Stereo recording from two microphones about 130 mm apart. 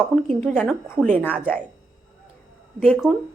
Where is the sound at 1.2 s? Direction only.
10° left (ahead or behind).